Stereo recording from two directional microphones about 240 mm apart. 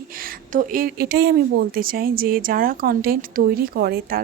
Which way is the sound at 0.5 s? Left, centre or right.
Right.